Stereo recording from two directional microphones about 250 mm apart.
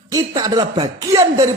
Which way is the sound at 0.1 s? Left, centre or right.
Centre.